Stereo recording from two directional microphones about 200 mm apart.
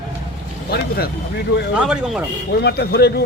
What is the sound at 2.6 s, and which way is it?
Speech, 55° left (ahead or behind).